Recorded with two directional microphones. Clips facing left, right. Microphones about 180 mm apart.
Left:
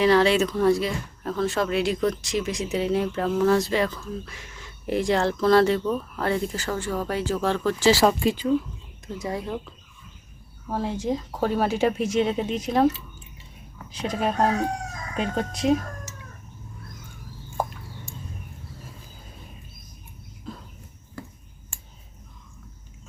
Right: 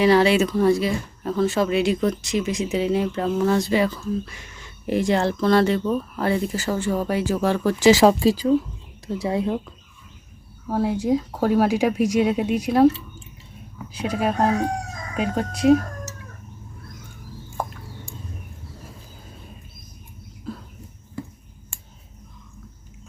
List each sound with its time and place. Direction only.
0.0 s speech: 10° right (ahead or behind)
6.7 s speech: 25° right (ahead or behind)
7.1 s speech: 10° right (ahead or behind)
8.0 s speech: 35° right (ahead or behind)
10.7 s speech: 10° right (ahead or behind)
13.9 s speech: 10° right (ahead or behind)